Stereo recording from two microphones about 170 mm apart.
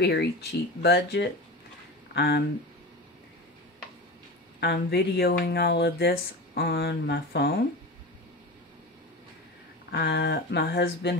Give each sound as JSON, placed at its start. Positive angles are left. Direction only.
{"t": 0.0, "sound": "speech", "side_deg": 70}
{"t": 4.6, "sound": "speech", "side_deg": 75}
{"t": 9.8, "sound": "speech", "side_deg": 90}